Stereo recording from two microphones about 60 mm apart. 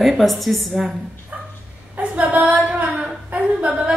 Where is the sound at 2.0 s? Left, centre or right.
Right.